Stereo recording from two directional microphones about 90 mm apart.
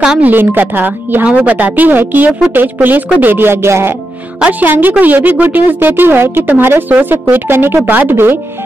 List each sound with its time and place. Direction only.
0.2 s a woman's voice: 20° right (ahead or behind)